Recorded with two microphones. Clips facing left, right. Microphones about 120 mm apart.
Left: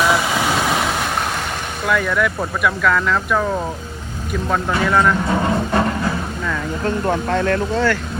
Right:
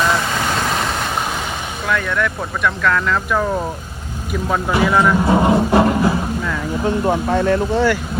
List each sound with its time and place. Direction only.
0.0 s vehicle: 5° left (ahead or behind)
1.9 s speech: 5° left (ahead or behind)
4.8 s speech: 10° right (ahead or behind)
5.4 s a sound: 20° right (ahead or behind)
6.8 s speech: 15° right (ahead or behind)